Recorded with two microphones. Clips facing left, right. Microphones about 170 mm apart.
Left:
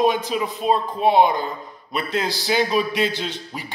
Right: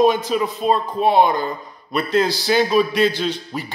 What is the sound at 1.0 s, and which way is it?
Speech, 15° left (ahead or behind).